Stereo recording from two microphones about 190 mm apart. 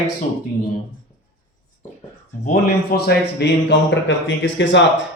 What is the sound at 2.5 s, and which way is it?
Speech, 55° left (ahead or behind).